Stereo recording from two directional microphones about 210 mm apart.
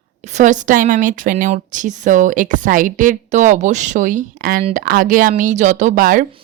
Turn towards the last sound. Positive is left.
turn(degrees=-40)  # may be behind; listen again after turning